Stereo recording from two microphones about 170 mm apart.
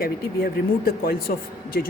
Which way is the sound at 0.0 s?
60° left (ahead or behind).